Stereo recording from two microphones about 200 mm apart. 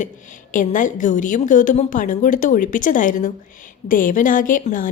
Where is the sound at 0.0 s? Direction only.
40° left (ahead or behind).